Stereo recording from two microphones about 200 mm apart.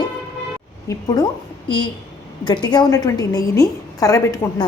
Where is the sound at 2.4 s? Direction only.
20° left (ahead or behind).